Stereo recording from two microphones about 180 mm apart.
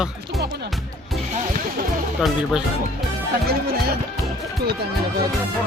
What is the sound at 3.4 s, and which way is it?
Speech, 60° right (ahead or behind).